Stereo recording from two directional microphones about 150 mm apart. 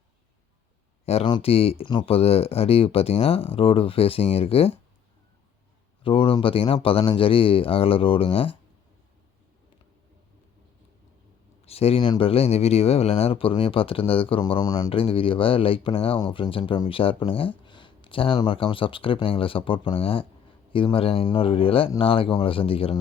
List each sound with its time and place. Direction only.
1.0 s speech: 45° left (ahead or behind)
6.0 s speech: 35° left (ahead or behind)
11.6 s speech: 40° left (ahead or behind)